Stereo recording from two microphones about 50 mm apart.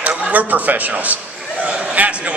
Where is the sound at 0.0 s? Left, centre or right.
Right.